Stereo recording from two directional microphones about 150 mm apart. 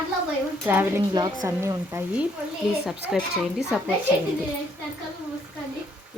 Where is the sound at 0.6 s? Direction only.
15° right (ahead or behind).